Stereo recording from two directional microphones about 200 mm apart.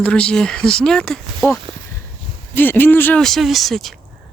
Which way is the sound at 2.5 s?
10° left (ahead or behind).